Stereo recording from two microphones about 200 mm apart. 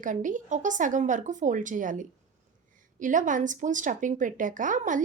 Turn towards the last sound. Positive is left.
turn(degrees=-40)  # may be behind; listen again after turning